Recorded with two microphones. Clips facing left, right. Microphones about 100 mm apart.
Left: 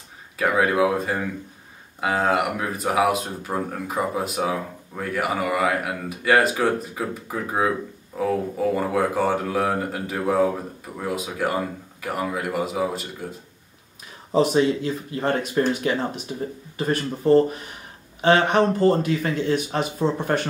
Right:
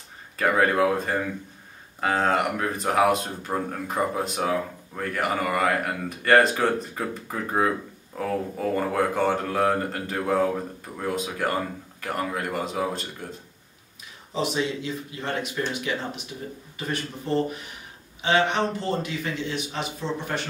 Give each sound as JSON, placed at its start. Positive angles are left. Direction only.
{"t": 0.4, "sound": "speech", "side_deg": 5}
{"t": 14.3, "sound": "speech", "side_deg": 45}